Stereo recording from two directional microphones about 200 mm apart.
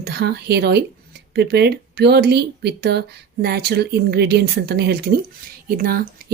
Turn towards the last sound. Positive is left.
turn(degrees=-45)  # may be behind; listen again after turning